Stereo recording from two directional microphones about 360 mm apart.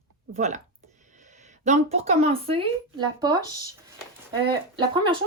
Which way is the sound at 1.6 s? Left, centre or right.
Centre.